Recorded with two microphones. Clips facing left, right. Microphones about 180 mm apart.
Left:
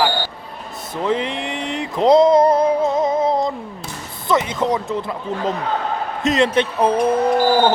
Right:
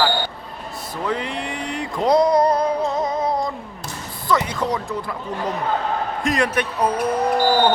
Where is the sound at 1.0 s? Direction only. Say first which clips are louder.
Left 4 dB; 20° left (ahead or behind).